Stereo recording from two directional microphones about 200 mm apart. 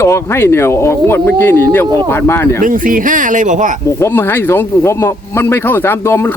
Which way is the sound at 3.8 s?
10° left (ahead or behind).